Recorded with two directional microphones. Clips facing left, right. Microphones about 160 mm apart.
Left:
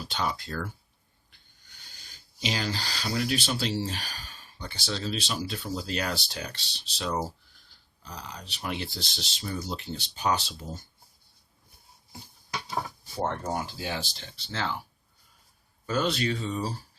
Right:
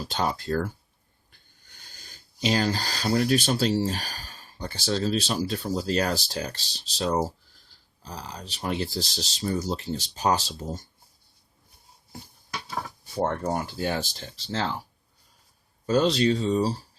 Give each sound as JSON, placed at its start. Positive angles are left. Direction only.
{"t": 0.0, "sound": "speech", "side_deg": -40}
{"t": 1.9, "sound": "speech", "side_deg": -45}
{"t": 13.4, "sound": "speech", "side_deg": -50}
{"t": 15.9, "sound": "speech", "side_deg": -35}